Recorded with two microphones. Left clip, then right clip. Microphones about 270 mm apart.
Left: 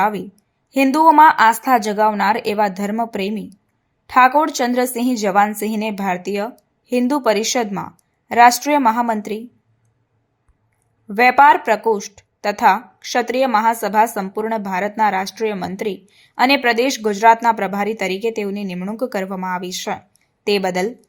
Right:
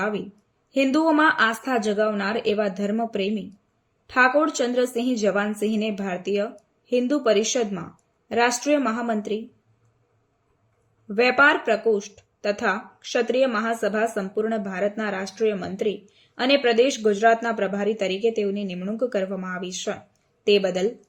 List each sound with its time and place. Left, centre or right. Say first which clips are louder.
0.0 s speech: left 9 dB; left
11.1 s speech: left 7 dB; left